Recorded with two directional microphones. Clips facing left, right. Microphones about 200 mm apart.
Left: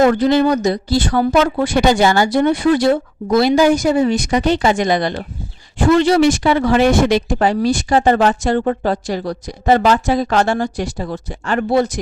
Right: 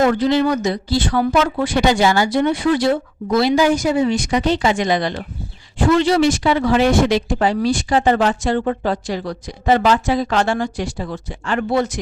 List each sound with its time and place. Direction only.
0.0 s speech: 45° left (ahead or behind)